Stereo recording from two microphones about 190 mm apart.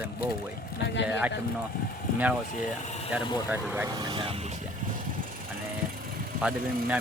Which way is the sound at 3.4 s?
10° right (ahead or behind).